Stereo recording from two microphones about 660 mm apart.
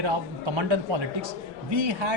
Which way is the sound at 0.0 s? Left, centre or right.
Right.